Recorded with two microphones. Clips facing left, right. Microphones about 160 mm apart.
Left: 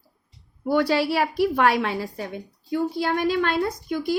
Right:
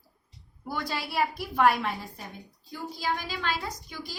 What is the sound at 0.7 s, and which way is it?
A woman's voice, 70° left (ahead or behind).